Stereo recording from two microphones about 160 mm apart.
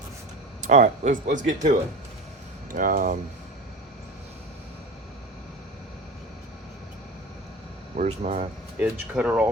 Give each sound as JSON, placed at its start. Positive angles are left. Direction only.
{"t": 0.6, "sound": "speech", "side_deg": -50}
{"t": 2.7, "sound": "speech", "side_deg": -60}
{"t": 7.9, "sound": "speech", "side_deg": -40}
{"t": 8.8, "sound": "speech", "side_deg": -10}